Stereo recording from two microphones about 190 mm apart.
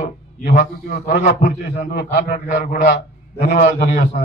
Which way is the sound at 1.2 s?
50° left (ahead or behind).